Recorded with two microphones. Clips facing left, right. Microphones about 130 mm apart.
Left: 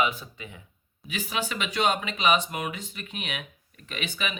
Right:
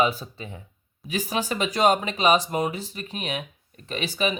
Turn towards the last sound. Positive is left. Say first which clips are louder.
# right 7 dB
turn(degrees=-35)  # may be behind; listen again after turning